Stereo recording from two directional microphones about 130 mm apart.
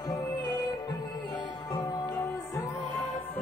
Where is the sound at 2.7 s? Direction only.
40° left (ahead or behind).